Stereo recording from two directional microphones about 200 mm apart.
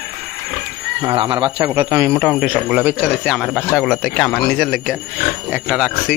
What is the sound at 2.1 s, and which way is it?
Speech, centre (ahead or behind).